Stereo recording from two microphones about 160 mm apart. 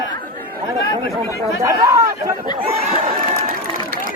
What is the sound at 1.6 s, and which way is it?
Speech, 20° right (ahead or behind).